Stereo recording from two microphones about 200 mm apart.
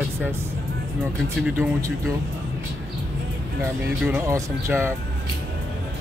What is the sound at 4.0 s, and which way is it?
Speech, 5° right (ahead or behind).